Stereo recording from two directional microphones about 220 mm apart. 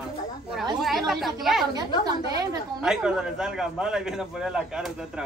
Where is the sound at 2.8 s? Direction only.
5° right (ahead or behind).